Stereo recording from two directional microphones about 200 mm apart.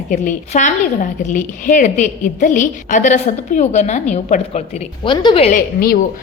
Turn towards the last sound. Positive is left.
turn(degrees=45)  # may be behind; listen again after turning